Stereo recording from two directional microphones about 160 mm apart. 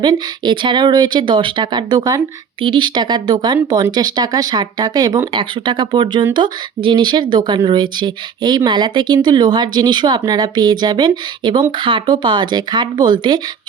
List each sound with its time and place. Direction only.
0.0 s speech: 30° right (ahead or behind)